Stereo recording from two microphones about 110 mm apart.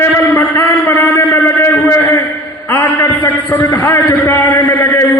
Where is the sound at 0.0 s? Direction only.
20° left (ahead or behind).